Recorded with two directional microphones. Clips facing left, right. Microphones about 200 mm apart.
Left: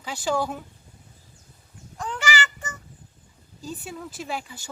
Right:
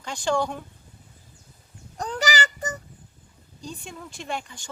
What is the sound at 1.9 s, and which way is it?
Child singing, 40° right (ahead or behind).